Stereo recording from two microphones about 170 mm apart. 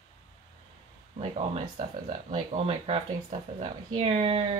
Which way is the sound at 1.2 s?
40° right (ahead or behind).